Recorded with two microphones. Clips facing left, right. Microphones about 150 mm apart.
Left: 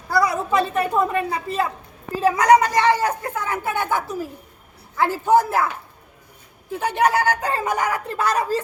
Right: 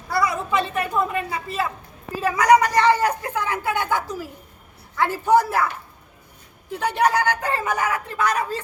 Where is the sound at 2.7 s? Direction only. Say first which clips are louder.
Even; 15° left (ahead or behind).